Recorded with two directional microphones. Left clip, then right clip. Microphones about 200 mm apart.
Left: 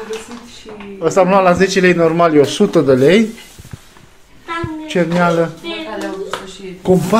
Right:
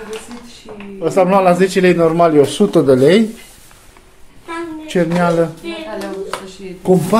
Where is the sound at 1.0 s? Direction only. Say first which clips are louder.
Left 1 dB; 10° right (ahead or behind).